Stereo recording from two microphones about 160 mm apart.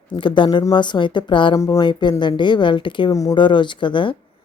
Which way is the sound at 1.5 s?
20° left (ahead or behind).